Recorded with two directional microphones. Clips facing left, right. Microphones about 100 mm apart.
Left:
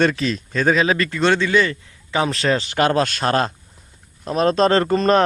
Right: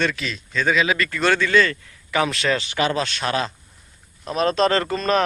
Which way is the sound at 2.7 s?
50° left (ahead or behind).